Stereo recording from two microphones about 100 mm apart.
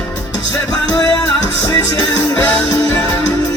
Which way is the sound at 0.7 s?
35° left (ahead or behind).